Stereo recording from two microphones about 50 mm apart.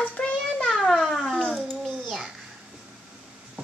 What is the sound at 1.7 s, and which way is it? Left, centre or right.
Babbling, centre.